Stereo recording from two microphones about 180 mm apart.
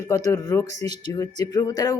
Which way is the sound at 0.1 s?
20° left (ahead or behind).